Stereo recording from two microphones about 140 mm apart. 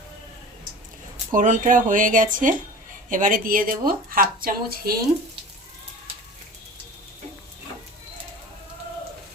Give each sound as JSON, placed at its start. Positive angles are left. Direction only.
{"t": 1.3, "sound": "speech", "side_deg": -65}